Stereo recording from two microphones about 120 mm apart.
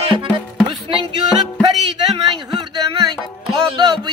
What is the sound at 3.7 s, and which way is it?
Music, 40° right (ahead or behind).